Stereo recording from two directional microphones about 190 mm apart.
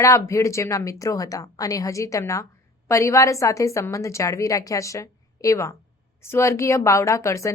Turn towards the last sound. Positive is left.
turn(degrees=15)  # may be behind; listen again after turning